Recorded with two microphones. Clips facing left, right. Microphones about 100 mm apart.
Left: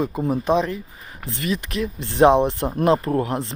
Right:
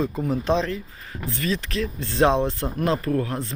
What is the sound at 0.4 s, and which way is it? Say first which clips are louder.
Speech: left 3 dB; 15° left (ahead or behind).